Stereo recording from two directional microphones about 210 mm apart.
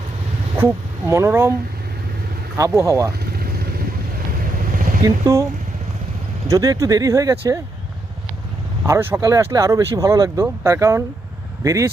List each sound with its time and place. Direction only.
0.5 s speech: 10° right (ahead or behind)
2.6 s speech: 15° right (ahead or behind)
4.7 s vehicle: 40° right (ahead or behind)
5.0 s speech: 15° right (ahead or behind)
6.5 s speech: 15° right (ahead or behind)
8.9 s speech: 10° right (ahead or behind)